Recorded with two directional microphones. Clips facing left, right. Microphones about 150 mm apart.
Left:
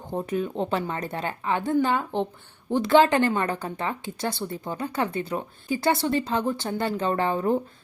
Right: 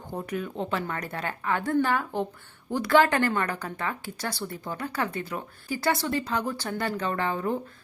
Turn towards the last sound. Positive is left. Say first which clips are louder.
# left 4 dB
turn(degrees=30)  # may be behind; listen again after turning